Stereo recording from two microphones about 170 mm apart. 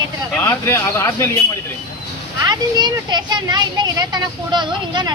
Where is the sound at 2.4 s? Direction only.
25° right (ahead or behind).